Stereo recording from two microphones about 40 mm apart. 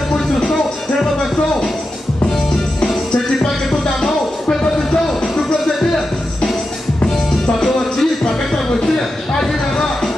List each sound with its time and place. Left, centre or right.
0.1 s music: centre
4.0 s music: centre
7.6 s music: centre
9.4 s a sound: centre